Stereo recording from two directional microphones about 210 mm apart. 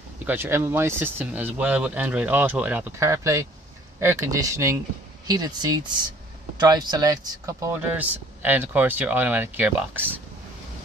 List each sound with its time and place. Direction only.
0.3 s speech: 10° right (ahead or behind)